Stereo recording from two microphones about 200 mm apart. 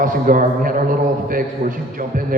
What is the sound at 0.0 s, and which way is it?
A man's voice, 45° right (ahead or behind).